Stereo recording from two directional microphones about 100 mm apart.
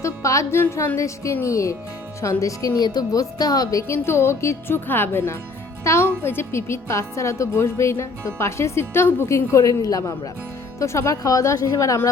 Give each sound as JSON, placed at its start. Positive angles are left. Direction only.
{"t": 0.0, "sound": "a woman's voice", "side_deg": 30}